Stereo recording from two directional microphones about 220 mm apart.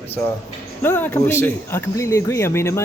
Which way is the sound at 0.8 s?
10° left (ahead or behind).